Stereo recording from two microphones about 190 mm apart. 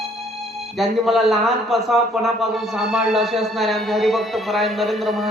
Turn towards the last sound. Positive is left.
turn(degrees=0)  # may be behind; listen again after turning